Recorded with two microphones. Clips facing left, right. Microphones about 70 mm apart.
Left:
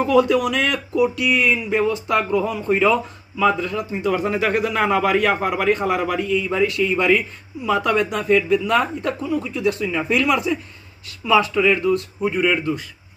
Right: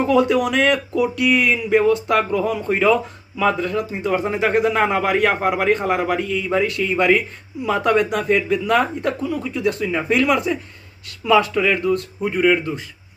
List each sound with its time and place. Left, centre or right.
0.0 s a man's voice: right
4.2 s a man's voice: right